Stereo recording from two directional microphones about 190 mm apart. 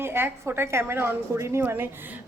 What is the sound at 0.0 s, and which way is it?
A woman's voice, 10° right (ahead or behind).